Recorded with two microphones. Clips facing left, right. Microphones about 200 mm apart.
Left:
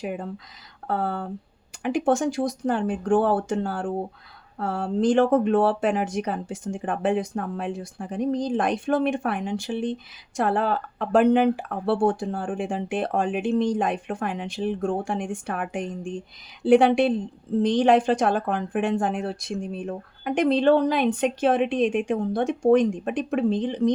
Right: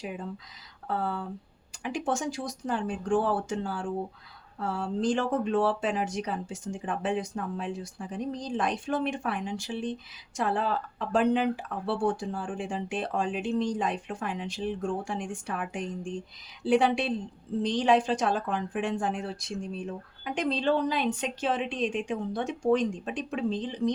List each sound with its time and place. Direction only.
0.0 s speech: 60° left (ahead or behind)